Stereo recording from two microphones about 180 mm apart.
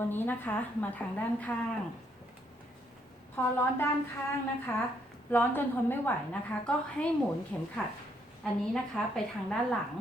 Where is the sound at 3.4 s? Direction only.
10° left (ahead or behind).